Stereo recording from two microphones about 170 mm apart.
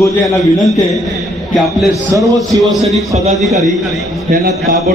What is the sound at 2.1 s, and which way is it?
Speech, 15° right (ahead or behind).